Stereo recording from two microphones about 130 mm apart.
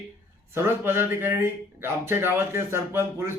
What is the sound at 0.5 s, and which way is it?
Speech, 20° right (ahead or behind).